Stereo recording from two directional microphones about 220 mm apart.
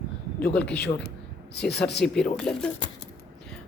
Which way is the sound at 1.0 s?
50° left (ahead or behind).